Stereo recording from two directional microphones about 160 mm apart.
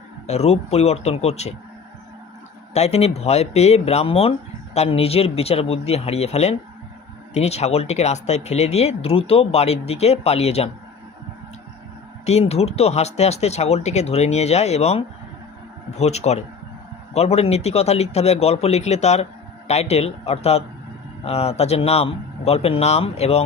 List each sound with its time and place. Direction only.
0.3 s speech: 40° left (ahead or behind)
2.7 s speech: 40° left (ahead or behind)
12.2 s speech: 40° left (ahead or behind)